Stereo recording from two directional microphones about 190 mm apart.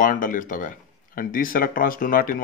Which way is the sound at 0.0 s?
45° left (ahead or behind).